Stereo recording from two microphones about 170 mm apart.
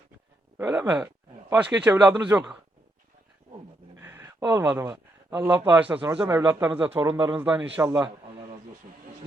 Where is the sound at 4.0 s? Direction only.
10° right (ahead or behind).